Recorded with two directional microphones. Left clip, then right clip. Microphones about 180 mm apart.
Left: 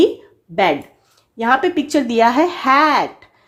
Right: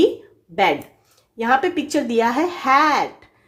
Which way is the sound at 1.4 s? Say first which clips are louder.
Left 3 dB; 30° left (ahead or behind).